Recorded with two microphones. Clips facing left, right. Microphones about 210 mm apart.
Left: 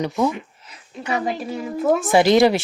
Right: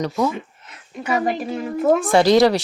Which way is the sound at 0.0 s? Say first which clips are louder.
Even; 15° left (ahead or behind).